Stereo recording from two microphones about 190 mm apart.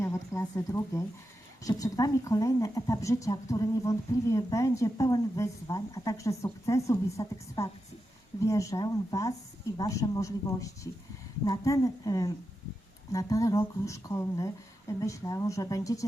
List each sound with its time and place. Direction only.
0.0 s speech: 15° left (ahead or behind)